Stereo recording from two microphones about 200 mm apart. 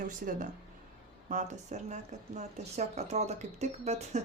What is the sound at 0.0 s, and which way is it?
Speech, 40° right (ahead or behind).